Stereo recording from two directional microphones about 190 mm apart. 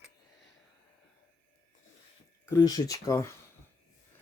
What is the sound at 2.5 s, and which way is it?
Speech, 20° left (ahead or behind).